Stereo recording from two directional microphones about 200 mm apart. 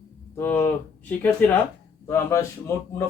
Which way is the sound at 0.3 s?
10° left (ahead or behind).